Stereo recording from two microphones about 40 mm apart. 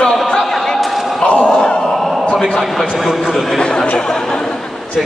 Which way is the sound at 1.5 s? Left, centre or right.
Centre.